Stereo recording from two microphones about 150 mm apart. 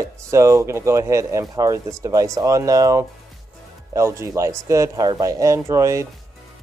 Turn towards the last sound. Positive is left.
turn(degrees=-20)  # may be behind; listen again after turning